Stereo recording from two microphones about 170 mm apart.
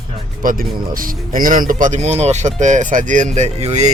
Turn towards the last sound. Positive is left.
turn(degrees=-40)  # may be behind; listen again after turning